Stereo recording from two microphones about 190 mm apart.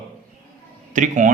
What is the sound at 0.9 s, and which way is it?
Speech, 40° right (ahead or behind).